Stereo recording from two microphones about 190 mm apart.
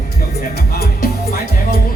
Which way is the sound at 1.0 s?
55° left (ahead or behind).